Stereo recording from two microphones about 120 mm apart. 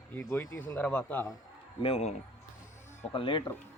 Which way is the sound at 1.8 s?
60° left (ahead or behind).